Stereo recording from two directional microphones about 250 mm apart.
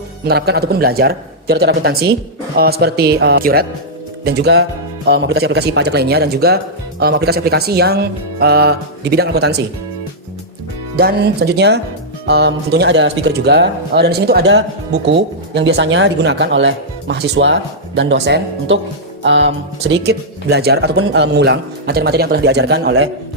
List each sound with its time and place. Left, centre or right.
0.3 s speech: right
10.9 s speech: right